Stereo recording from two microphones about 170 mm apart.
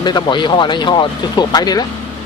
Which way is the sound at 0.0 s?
25° left (ahead or behind).